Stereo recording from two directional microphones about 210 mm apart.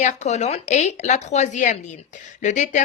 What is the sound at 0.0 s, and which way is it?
A woman's voice, 35° left (ahead or behind).